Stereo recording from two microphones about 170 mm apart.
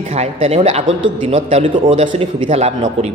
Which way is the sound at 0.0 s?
40° right (ahead or behind).